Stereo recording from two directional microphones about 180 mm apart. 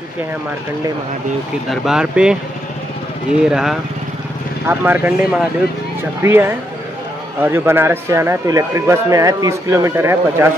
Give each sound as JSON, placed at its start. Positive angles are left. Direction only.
{"t": 1.7, "sound": "speech", "side_deg": -5}
{"t": 3.4, "sound": "speech", "side_deg": -5}